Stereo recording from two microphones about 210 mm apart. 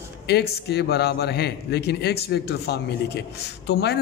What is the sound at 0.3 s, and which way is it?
A man's voice, 50° left (ahead or behind).